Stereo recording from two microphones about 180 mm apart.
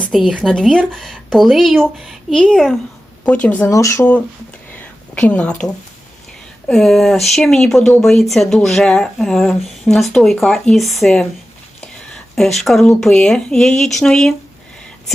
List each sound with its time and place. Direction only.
0.0 s speech: centre (ahead or behind)
4.7 s a sound: 5° left (ahead or behind)
6.7 s speech: centre (ahead or behind)